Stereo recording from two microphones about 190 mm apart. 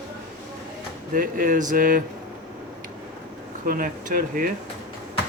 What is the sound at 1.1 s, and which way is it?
Speech, 45° right (ahead or behind).